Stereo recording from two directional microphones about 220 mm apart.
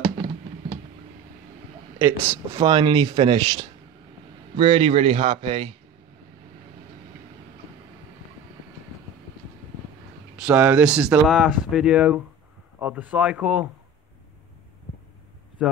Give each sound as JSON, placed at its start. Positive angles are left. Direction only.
{"t": 2.0, "sound": "speech", "side_deg": -15}
{"t": 10.4, "sound": "speech", "side_deg": -5}